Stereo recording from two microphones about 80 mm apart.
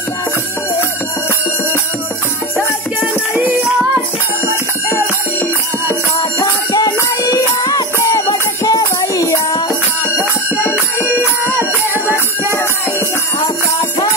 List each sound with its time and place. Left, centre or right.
6.1 s music: left
11.4 s music: right